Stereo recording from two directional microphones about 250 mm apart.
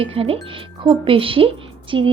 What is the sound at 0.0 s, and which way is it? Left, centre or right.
Speech, right.